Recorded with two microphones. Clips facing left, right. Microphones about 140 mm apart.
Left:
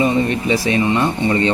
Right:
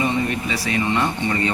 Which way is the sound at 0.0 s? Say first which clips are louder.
Left 5 dB; 25° left (ahead or behind).